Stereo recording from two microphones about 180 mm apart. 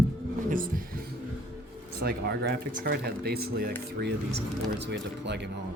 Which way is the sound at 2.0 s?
70° right (ahead or behind).